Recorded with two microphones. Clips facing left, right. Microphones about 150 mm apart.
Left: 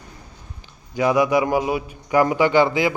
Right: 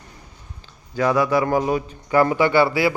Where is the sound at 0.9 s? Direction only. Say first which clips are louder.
Left 1 dB; 15° left (ahead or behind).